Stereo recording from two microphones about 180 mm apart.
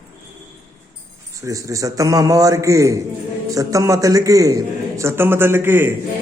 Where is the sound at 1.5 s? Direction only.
20° right (ahead or behind).